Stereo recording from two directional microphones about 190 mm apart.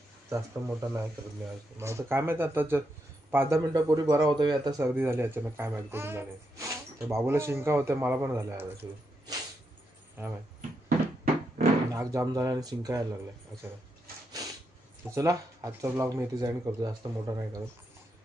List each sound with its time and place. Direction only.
0.3 s speech: 15° right (ahead or behind)
11.9 s speech: 20° right (ahead or behind)
15.1 s speech: 15° right (ahead or behind)